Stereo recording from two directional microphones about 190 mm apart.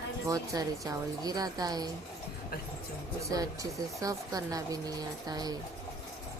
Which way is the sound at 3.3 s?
20° right (ahead or behind).